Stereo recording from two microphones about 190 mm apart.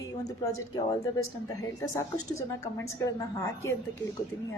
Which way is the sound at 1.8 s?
15° left (ahead or behind).